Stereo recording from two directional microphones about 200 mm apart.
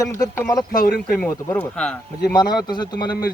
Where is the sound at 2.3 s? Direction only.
20° left (ahead or behind).